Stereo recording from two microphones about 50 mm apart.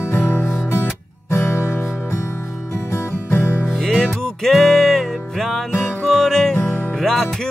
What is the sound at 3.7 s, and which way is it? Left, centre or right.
Music, centre.